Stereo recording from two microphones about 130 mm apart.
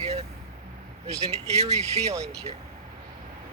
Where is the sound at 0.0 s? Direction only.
55° right (ahead or behind).